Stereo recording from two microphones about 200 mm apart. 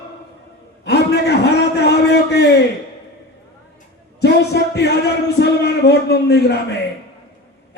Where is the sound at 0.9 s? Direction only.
55° left (ahead or behind).